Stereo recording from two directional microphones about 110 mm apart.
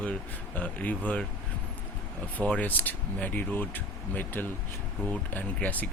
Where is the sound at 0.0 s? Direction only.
15° left (ahead or behind).